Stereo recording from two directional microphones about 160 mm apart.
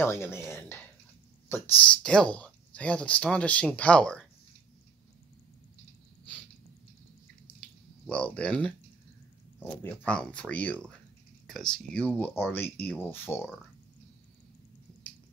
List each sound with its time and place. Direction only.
0.0 s speech: 15° left (ahead or behind)
7.6 s drip: 5° left (ahead or behind)
9.6 s speech: 10° left (ahead or behind)